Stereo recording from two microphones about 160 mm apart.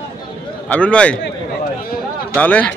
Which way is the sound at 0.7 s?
5° left (ahead or behind).